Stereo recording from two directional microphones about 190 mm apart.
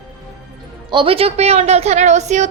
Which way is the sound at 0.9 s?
25° right (ahead or behind).